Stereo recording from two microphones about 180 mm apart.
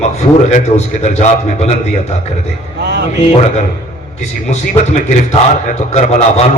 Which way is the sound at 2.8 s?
70° right (ahead or behind).